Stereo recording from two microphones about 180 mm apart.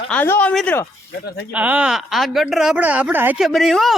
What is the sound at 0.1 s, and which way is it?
Speech, 10° left (ahead or behind).